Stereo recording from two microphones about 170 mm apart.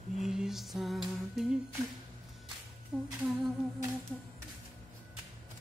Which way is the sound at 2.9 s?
5° right (ahead or behind).